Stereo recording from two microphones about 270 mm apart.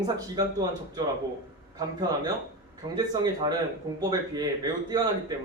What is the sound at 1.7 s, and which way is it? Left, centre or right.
Speech, centre.